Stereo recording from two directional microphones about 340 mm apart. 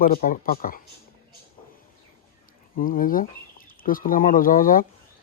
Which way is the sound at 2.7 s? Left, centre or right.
Left.